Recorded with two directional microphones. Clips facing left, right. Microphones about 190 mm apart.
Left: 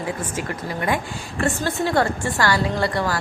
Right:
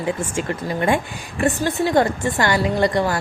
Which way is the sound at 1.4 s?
15° right (ahead or behind).